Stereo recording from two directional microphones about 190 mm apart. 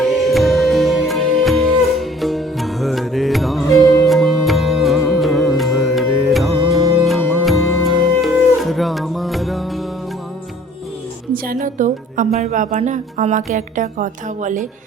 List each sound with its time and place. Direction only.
0.0 s music: centre (ahead or behind)
11.4 s a woman's voice: 45° right (ahead or behind)